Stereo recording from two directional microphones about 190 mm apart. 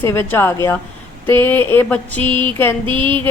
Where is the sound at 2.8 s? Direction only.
25° right (ahead or behind).